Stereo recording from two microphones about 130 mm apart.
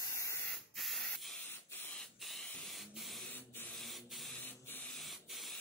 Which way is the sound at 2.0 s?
Centre (ahead or behind).